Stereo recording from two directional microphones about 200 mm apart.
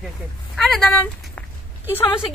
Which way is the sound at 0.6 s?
Centre (ahead or behind).